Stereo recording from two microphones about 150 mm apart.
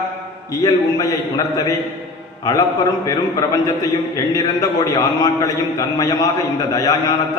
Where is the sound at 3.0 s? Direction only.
25° left (ahead or behind).